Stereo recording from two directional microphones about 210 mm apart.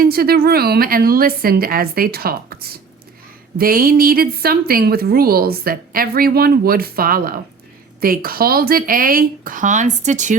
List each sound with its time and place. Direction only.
0.0 s a woman's voice: 45° right (ahead or behind)